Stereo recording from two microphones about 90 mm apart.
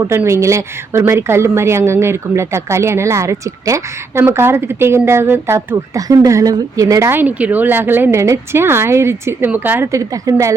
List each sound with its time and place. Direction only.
0.3 s a woman's voice: 35° right (ahead or behind)
7.1 s speech: 20° right (ahead or behind)
9.9 s a woman's voice: 40° right (ahead or behind)